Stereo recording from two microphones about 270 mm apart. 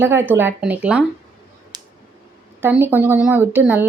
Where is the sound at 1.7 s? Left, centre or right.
Centre.